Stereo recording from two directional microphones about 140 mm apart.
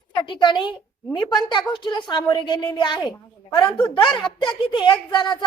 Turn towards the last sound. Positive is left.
turn(degrees=35)  # may be behind; listen again after turning